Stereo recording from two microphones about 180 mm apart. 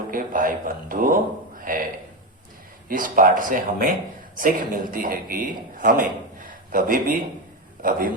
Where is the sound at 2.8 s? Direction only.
50° right (ahead or behind).